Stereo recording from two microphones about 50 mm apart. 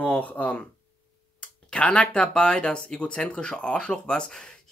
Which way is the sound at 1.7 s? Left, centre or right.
Centre.